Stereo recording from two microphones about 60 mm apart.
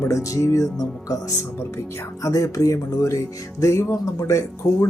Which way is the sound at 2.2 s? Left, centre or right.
Left.